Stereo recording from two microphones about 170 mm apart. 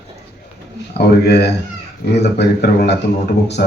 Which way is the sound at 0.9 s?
80° left.